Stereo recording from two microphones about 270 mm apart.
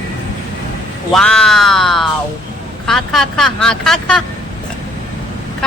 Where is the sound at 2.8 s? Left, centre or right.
Centre.